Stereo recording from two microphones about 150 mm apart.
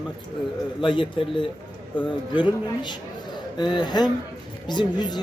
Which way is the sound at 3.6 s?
30° left (ahead or behind).